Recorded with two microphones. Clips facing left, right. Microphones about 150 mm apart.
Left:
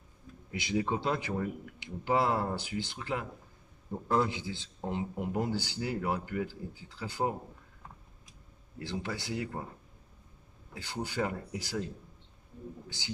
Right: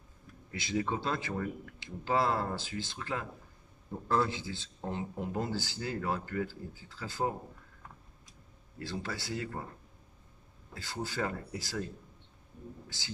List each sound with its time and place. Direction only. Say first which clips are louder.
0.5 s speech: left 2 dB; 15° left (ahead or behind)
8.7 s speech: left 2 dB; 20° left (ahead or behind)
10.7 s speech: left 1 dB; 15° left (ahead or behind)